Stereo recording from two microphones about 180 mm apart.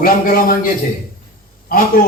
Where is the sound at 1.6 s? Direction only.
50° left (ahead or behind).